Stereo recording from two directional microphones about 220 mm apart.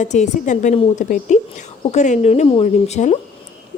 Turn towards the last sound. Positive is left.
turn(degrees=30)  # may be behind; listen again after turning